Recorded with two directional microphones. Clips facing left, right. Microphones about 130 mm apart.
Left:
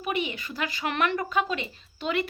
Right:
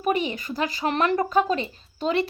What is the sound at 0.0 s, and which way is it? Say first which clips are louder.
Speech: right 5 dB; 40° right (ahead or behind).